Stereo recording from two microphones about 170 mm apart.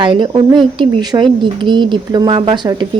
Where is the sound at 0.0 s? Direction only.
30° right (ahead or behind).